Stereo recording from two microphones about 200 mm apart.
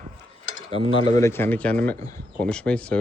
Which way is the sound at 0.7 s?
30° right (ahead or behind).